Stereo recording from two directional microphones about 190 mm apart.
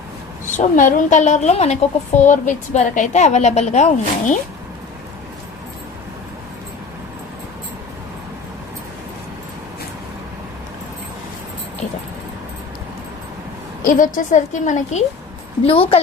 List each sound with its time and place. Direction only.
0.6 s a woman's voice: 40° left (ahead or behind)
13.8 s a woman's voice: 45° left (ahead or behind)